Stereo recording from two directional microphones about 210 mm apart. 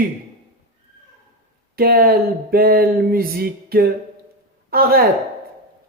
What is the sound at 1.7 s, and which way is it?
Speech, 45° right (ahead or behind).